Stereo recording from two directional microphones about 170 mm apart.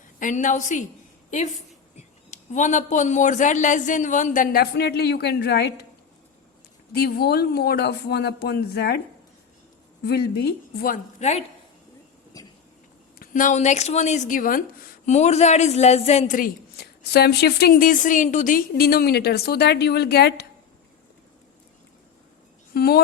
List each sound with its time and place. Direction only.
0.2 s a man's voice: 50° left (ahead or behind)
2.3 s a man's voice: 45° left (ahead or behind); by 5.8 s 75° left (ahead or behind)
6.9 s a woman's voice: 65° left (ahead or behind)
10.0 s a woman's voice: 70° left (ahead or behind); by 11.4 s 40° left (ahead or behind)
13.1 s a man's voice: 50° left (ahead or behind)
15.0 s a woman's voice: 40° left (ahead or behind)
16.7 s a woman's voice: 70° left (ahead or behind)
22.7 s a woman's voice: 65° left (ahead or behind)